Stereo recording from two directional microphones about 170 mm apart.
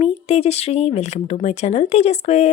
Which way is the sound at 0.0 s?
40° left (ahead or behind).